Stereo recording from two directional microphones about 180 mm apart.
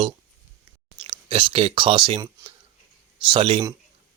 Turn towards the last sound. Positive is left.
turn(degrees=-30)  # may be behind; listen again after turning